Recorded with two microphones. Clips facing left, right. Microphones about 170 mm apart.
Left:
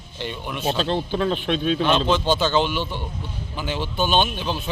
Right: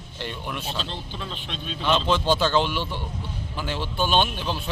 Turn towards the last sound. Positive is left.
turn(degrees=0)  # may be behind; listen again after turning